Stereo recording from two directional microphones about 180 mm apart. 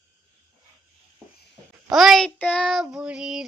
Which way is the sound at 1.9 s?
Centre (ahead or behind).